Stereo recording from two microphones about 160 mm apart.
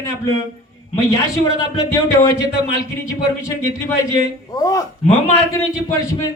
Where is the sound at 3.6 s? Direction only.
15° left (ahead or behind).